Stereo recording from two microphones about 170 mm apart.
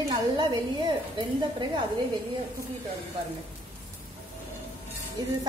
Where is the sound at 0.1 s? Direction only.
25° right (ahead or behind).